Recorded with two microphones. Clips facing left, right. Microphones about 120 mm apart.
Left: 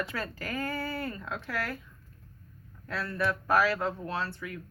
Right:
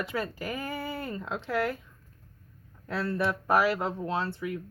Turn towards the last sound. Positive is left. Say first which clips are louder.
# right 4 dB
turn(degrees=-20)  # may be behind; listen again after turning